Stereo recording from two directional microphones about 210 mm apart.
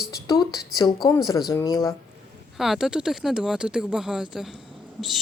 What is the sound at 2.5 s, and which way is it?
Speech, centre (ahead or behind).